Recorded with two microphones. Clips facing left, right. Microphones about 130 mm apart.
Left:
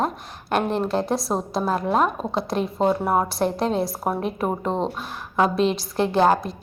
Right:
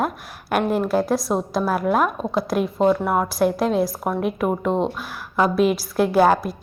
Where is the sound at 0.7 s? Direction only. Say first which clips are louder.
Right 3 dB; 5° right (ahead or behind).